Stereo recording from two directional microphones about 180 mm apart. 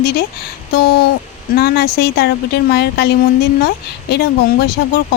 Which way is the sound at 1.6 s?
60° left (ahead or behind).